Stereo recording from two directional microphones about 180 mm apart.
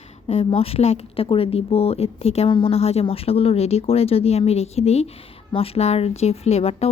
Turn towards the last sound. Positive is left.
turn(degrees=35)  # may be behind; listen again after turning